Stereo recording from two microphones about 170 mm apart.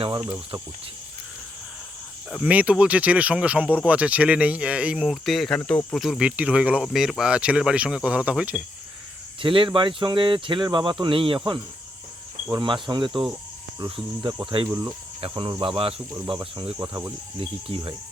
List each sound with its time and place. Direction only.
0.0 s speech: 30° right (ahead or behind)
2.3 s speech: 10° right (ahead or behind)
9.4 s speech: 30° right (ahead or behind)
12.5 s speech: 25° right (ahead or behind)
15.2 s speech: 30° right (ahead or behind)
16.7 s speech: 15° right (ahead or behind)
17.4 s speech: 30° right (ahead or behind)